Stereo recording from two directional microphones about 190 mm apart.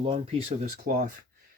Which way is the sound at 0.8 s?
60° right (ahead or behind).